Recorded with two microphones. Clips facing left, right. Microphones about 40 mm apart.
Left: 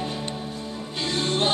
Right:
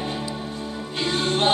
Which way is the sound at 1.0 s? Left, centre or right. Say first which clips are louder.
Right 3 dB; right.